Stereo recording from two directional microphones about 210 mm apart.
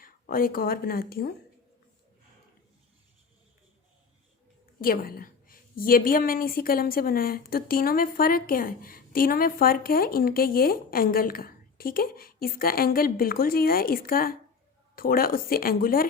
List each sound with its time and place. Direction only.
0.0 s speech: 45° left (ahead or behind)
4.8 s a woman's voice: 45° left (ahead or behind)